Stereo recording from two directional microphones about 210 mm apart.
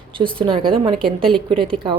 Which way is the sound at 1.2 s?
5° left (ahead or behind).